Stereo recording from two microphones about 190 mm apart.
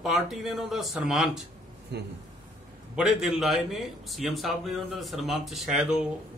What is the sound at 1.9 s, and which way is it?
Speech, 60° right (ahead or behind).